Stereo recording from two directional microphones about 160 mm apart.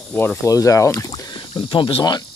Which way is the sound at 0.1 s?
10° left (ahead or behind).